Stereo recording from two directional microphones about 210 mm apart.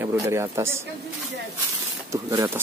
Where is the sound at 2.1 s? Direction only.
15° right (ahead or behind).